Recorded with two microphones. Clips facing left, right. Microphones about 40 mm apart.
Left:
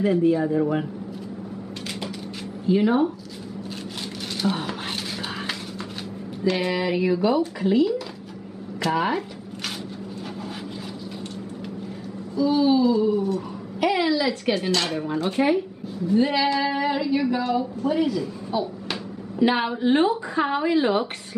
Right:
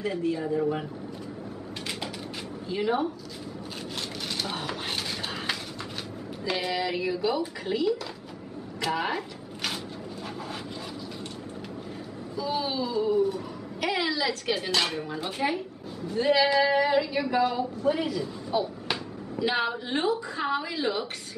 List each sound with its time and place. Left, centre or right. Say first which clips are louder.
0.0 s a woman's voice: left 9 dB; centre
2.7 s a woman's voice: left 7 dB; centre
4.4 s speech: left 8 dB; centre
6.5 s a woman's voice: left 3 dB; centre
7.6 s speech: left 6 dB; centre
12.4 s speech: left 10 dB; centre
18.5 s a sound: even; centre
19.4 s a woman's voice: left 7 dB; centre